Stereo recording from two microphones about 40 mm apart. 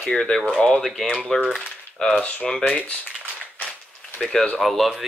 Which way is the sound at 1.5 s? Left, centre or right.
Centre.